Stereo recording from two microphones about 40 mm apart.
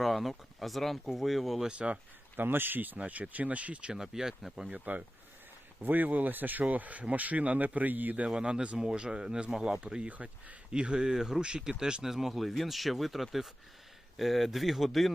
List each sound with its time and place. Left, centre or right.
0.0 s speech: centre
2.3 s speech: right
3.0 s speech: right
3.9 s speech: centre
4.7 s speech: right
5.8 s speech: right
8.4 s speech: right
12.0 s speech: centre